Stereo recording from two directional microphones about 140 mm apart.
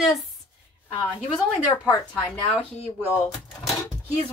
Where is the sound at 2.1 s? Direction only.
10° left (ahead or behind).